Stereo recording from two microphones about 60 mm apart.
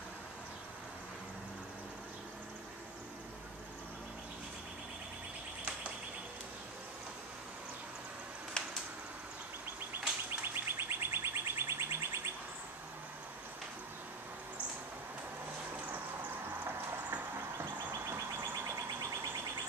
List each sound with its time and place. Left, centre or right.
8.6 s a sound: centre
9.8 s bird: right
16.6 s clip-clop: right